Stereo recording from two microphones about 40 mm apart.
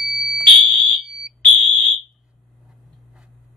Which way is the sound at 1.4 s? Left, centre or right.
Left.